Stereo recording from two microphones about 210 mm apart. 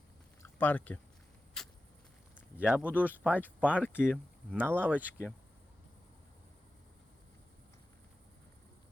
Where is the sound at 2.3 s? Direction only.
5° right (ahead or behind).